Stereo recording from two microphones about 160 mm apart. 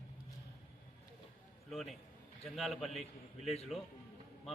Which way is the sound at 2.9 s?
40° left (ahead or behind).